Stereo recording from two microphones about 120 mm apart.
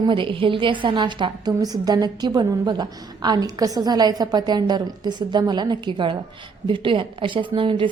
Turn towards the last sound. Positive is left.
turn(degrees=-45)  # may be behind; listen again after turning